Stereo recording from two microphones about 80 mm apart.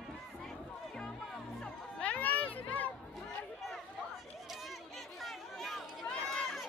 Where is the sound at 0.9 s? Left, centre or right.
Centre.